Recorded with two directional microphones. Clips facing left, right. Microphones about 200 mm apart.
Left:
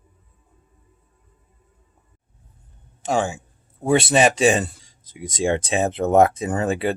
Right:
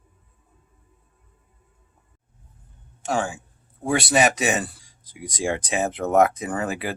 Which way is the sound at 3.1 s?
25° left (ahead or behind).